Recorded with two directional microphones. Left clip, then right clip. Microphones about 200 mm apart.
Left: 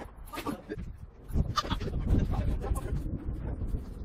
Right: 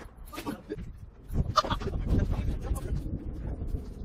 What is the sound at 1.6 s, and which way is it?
Goat, 15° right (ahead or behind).